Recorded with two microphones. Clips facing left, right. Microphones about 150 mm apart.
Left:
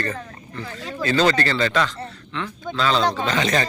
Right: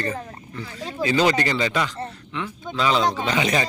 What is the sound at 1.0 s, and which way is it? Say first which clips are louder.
A man's voice: even; 15° right (ahead or behind).